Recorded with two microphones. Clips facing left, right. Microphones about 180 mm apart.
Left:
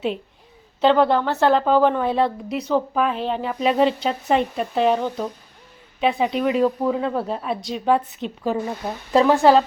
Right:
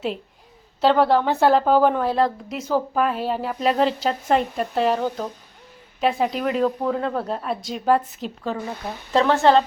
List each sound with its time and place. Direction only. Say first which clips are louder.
0.8 s a woman's voice: left 1 dB; 5° right (ahead or behind)
9.1 s speech: left 2 dB; 10° left (ahead or behind)